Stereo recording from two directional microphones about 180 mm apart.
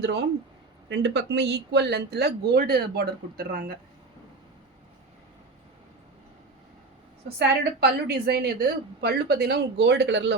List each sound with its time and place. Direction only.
0.0 s speech: 70° right (ahead or behind)
7.3 s speech: 65° right (ahead or behind)